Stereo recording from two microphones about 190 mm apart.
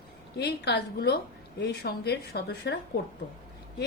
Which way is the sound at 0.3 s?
60° left (ahead or behind).